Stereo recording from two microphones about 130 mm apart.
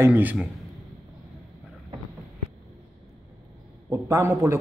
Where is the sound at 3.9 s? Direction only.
25° right (ahead or behind).